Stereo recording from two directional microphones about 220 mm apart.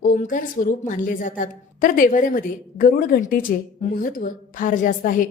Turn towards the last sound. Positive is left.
turn(degrees=40)  # may be behind; listen again after turning